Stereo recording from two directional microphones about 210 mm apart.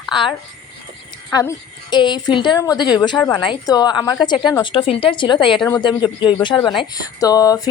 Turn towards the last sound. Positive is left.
turn(degrees=15)  # may be behind; listen again after turning